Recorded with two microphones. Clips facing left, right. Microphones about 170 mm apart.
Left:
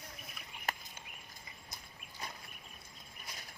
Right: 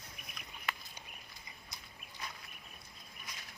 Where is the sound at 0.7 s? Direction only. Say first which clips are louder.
Left 2 dB; 45° left (ahead or behind).